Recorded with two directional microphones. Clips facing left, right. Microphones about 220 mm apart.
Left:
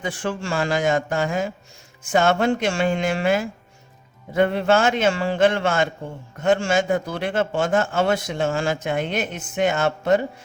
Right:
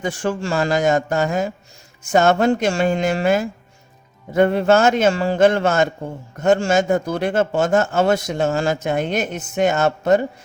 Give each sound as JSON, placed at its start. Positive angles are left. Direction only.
{"t": 0.0, "sound": "a man's voice", "side_deg": -45}